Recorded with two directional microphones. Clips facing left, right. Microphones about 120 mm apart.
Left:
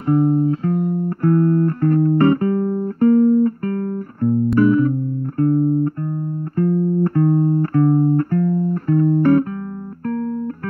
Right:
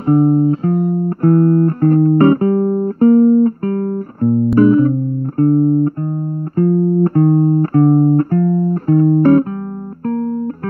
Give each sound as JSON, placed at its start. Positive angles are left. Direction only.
{"t": 0.0, "sound": "music", "side_deg": -35}